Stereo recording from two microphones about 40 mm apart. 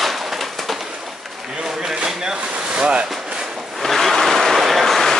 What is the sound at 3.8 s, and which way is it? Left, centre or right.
Vehicle, centre.